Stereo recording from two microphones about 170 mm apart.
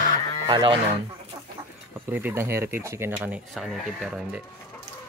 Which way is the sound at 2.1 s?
10° right (ahead or behind).